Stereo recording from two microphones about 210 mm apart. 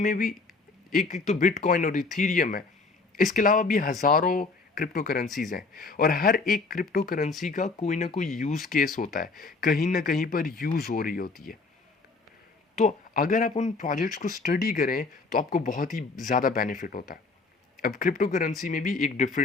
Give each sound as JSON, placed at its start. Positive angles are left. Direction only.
{"t": 0.0, "sound": "speech", "side_deg": 40}
{"t": 5.2, "sound": "speech", "side_deg": 0}
{"t": 5.5, "sound": "speech", "side_deg": 45}
{"t": 12.7, "sound": "speech", "side_deg": 35}